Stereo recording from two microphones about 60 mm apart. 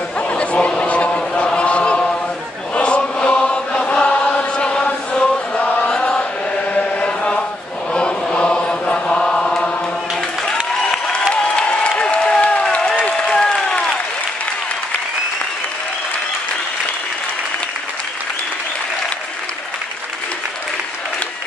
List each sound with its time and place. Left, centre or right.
0.3 s a sound: centre
1.1 s chant: centre
3.7 s chant: centre; by 5.9 s left
5.9 s chant: centre
6.5 s chant: left
10.4 s applause: centre